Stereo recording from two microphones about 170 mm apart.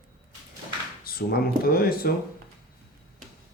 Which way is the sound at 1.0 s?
60° left (ahead or behind).